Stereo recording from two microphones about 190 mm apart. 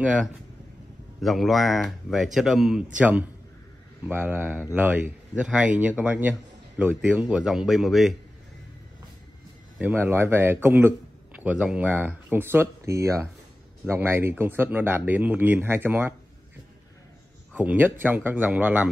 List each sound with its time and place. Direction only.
0.0 s speech: 5° right (ahead or behind)
9.8 s speech: 10° right (ahead or behind)
17.6 s speech: 10° right (ahead or behind)